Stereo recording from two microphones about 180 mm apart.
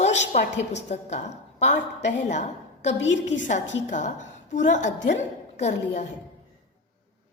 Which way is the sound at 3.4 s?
40° left (ahead or behind).